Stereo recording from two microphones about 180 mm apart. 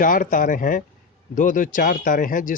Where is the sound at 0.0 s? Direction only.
50° left (ahead or behind).